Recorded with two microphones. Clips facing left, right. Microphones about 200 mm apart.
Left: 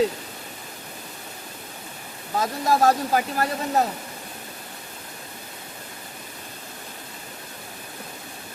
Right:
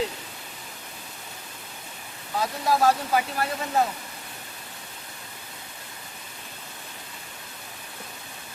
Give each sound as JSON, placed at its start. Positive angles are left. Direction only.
{"t": 2.4, "sound": "speech", "side_deg": 45}